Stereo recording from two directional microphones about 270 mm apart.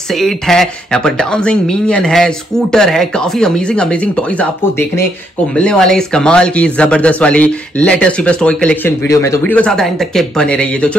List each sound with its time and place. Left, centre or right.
0.1 s speech: centre